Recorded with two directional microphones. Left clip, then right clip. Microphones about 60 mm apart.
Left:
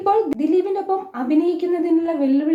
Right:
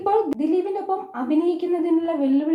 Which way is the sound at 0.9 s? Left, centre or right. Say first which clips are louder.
Left 1 dB; right.